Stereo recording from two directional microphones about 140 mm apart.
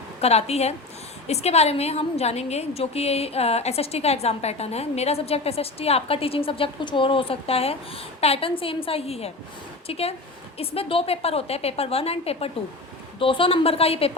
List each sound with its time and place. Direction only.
0.2 s a woman's voice: 50° left (ahead or behind)